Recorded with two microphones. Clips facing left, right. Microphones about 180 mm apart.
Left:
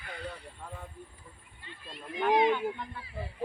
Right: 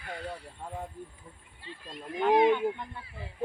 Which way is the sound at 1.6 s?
35° right (ahead or behind).